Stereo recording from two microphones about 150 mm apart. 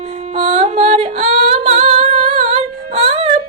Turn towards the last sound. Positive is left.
turn(degrees=-45)  # may be behind; listen again after turning